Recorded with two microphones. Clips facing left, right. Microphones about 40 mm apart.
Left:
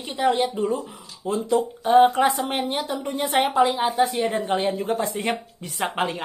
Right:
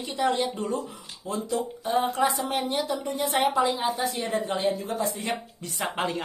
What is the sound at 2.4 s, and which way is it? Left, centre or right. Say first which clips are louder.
Speech: left 1 dB; left.